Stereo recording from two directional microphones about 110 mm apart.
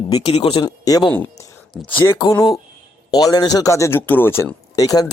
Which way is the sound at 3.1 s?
35° left (ahead or behind).